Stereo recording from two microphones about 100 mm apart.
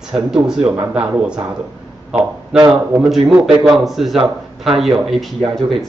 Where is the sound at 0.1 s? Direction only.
5° right (ahead or behind).